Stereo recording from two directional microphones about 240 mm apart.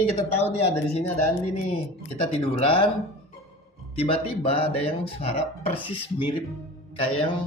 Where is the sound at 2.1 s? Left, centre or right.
Left.